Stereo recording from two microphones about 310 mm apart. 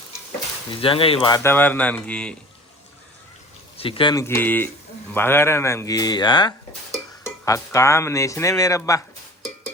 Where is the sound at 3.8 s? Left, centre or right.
Centre.